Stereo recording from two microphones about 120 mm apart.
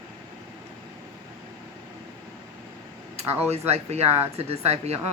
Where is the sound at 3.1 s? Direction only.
60° right (ahead or behind).